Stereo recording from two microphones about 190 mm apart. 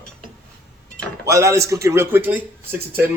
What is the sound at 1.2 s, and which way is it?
A man's voice, 15° right (ahead or behind).